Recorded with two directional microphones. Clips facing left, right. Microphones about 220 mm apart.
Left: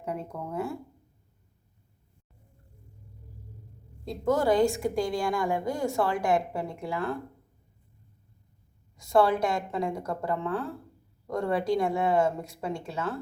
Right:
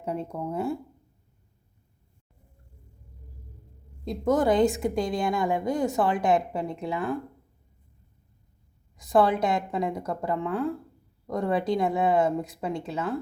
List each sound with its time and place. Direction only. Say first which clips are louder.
0.0 s a woman's voice: right 4 dB; 30° right (ahead or behind)
4.0 s a woman's voice: right 2 dB; 20° right (ahead or behind)
9.0 s a woman's voice: right 1 dB; 20° right (ahead or behind)